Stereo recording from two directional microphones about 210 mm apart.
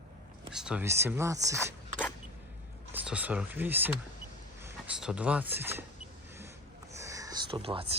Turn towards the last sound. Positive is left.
turn(degrees=-25)  # may be behind; listen again after turning